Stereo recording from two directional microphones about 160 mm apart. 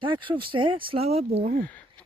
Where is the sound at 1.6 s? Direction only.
10° left (ahead or behind).